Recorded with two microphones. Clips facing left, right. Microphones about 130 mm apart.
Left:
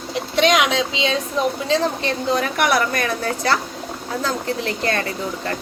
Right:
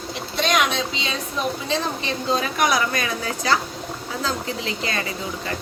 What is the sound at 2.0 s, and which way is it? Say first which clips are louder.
A woman's voice: left 3 dB; 70° left (ahead or behind).